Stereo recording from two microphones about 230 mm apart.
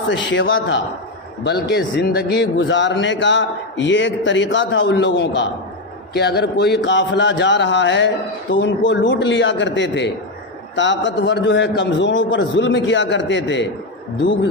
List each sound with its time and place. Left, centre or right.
0.1 s speech: left